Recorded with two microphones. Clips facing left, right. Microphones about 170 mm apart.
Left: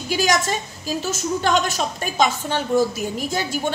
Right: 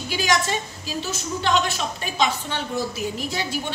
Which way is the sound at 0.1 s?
45° left (ahead or behind).